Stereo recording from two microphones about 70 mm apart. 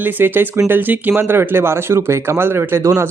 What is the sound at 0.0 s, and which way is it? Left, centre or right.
A man's voice, right.